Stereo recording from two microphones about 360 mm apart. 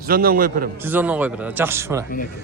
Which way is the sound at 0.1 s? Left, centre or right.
Right.